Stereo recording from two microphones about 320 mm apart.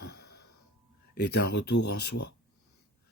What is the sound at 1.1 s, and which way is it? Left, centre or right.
Speech, left.